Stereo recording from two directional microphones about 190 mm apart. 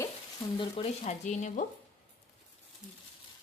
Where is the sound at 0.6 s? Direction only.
30° left (ahead or behind).